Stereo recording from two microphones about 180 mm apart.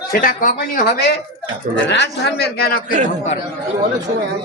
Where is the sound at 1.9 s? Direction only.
70° left (ahead or behind).